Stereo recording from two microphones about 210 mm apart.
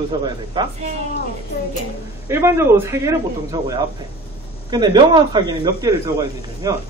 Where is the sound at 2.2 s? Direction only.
10° right (ahead or behind).